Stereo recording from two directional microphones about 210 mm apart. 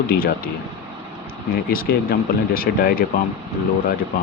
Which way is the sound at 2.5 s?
45° left (ahead or behind).